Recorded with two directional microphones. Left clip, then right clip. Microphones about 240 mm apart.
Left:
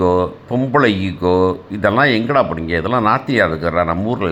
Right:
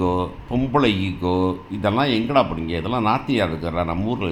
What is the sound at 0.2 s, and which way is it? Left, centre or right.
Speech, centre.